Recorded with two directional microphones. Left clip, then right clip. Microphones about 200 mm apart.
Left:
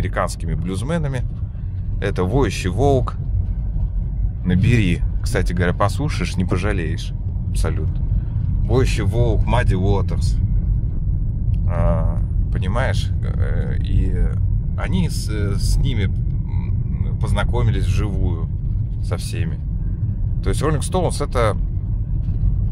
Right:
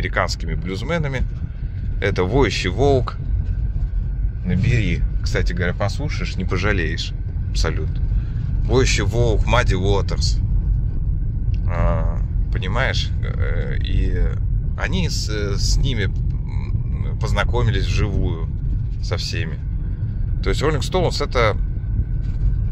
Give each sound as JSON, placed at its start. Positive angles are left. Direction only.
{"t": 0.0, "sound": "speech", "side_deg": 15}
{"t": 4.5, "sound": "speech", "side_deg": 40}
{"t": 4.9, "sound": "speech", "side_deg": 25}
{"t": 6.5, "sound": "speech", "side_deg": 10}
{"t": 8.6, "sound": "speech", "side_deg": 10}
{"t": 11.7, "sound": "speech", "side_deg": 10}